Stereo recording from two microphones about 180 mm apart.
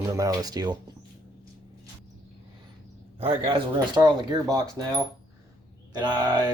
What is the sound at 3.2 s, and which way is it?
Speech, 30° right (ahead or behind).